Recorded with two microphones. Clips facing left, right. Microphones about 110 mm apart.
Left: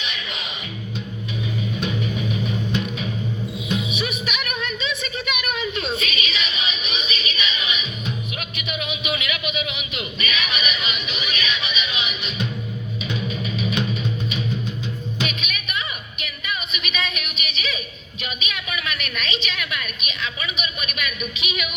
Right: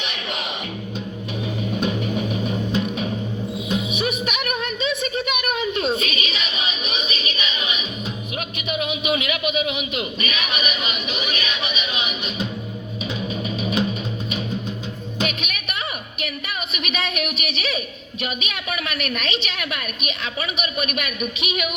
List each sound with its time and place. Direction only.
1.7 s music: 45° right (ahead or behind)
3.9 s a sound: 45° right (ahead or behind)
13.1 s music: 40° right (ahead or behind)
15.2 s music: 55° right (ahead or behind)
16.2 s a sound: 55° right (ahead or behind)
18.2 s a woman's voice: 55° right (ahead or behind)